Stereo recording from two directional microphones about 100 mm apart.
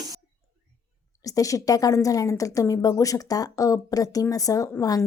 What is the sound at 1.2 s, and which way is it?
Speech, 35° left (ahead or behind).